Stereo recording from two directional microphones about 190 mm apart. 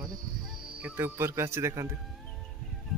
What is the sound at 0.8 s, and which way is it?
Speech, 10° right (ahead or behind).